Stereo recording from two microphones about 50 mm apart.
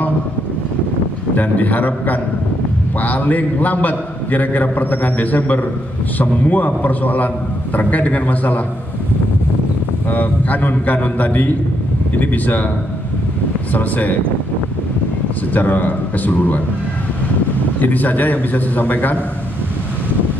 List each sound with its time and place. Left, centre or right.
1.3 s a man's voice: left
10.0 s a man's voice: left
13.7 s a man's voice: left
15.5 s a man's voice: left
17.7 s a man's voice: left